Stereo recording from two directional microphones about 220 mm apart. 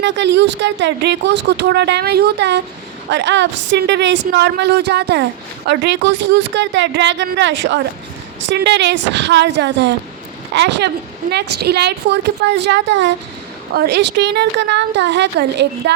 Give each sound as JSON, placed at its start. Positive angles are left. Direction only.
{"t": 0.0, "sound": "speech", "side_deg": -55}